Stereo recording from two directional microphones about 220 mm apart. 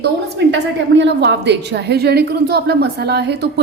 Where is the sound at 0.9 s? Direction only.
50° right (ahead or behind).